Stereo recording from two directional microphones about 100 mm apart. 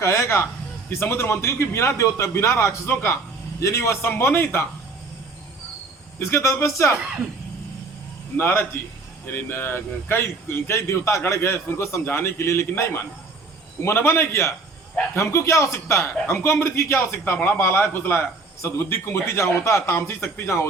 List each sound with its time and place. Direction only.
0.0 s a sound: 30° left (ahead or behind)
0.9 s a man's voice: 25° left (ahead or behind)
6.1 s a man's voice: 25° left (ahead or behind)
8.4 s a man's voice: 25° left (ahead or behind)